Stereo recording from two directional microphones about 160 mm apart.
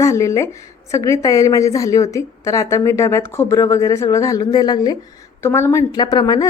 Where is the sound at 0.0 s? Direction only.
20° left (ahead or behind).